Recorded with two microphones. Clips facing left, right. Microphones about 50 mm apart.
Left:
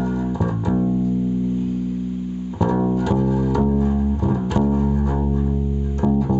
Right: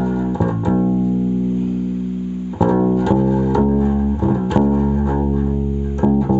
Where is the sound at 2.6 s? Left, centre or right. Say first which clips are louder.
Right 5 dB; centre.